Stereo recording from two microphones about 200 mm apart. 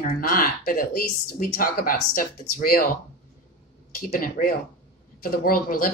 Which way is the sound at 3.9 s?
45° left (ahead or behind).